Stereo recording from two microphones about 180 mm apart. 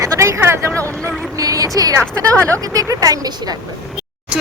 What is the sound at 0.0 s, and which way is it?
Speech, 15° right (ahead or behind).